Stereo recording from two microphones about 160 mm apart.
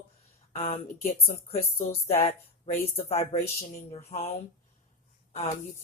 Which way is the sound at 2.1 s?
35° left (ahead or behind).